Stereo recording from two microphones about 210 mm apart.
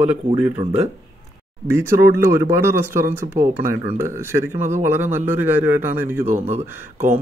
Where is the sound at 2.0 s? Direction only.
45° right (ahead or behind).